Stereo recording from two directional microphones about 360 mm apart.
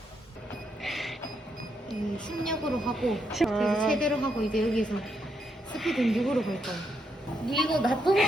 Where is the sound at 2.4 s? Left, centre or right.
Centre.